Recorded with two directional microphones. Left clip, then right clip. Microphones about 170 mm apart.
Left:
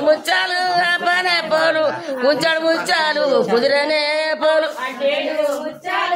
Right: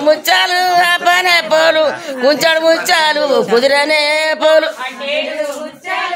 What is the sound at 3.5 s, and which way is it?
Speech, 35° right (ahead or behind).